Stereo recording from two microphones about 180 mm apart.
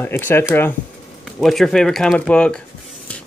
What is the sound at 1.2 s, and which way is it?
Speech, centre (ahead or behind).